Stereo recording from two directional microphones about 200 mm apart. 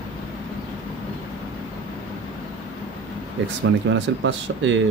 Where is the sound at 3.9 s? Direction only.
70° right (ahead or behind).